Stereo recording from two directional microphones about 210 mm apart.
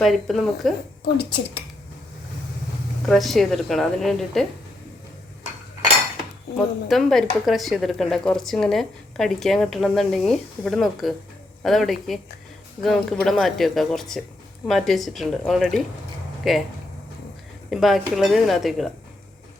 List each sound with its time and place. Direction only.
0.0 s speech: centre (ahead or behind)
1.0 s speech: 50° left (ahead or behind)
3.1 s speech: centre (ahead or behind)
6.6 s speech: centre (ahead or behind)
17.7 s speech: centre (ahead or behind)